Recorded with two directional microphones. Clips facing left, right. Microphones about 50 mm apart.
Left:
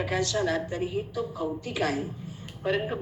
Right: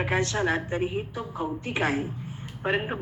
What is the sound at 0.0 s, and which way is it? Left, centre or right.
Speech, right.